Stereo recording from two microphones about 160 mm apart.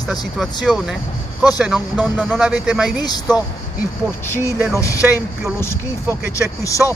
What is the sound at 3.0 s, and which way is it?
Speech, 25° left (ahead or behind).